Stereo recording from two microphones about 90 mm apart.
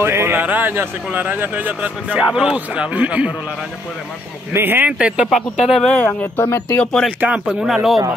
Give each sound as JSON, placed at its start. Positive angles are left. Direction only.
{"t": 0.0, "sound": "speech", "side_deg": -30}
{"t": 2.1, "sound": "a man's voice", "side_deg": -10}
{"t": 4.5, "sound": "a man's voice", "side_deg": -25}
{"t": 5.3, "sound": "speech", "side_deg": 5}
{"t": 5.9, "sound": "speech", "side_deg": 20}
{"t": 6.4, "sound": "speech", "side_deg": 35}
{"t": 6.8, "sound": "speech", "side_deg": 5}
{"t": 7.1, "sound": "a man's voice", "side_deg": -15}
{"t": 7.6, "sound": "speech", "side_deg": -5}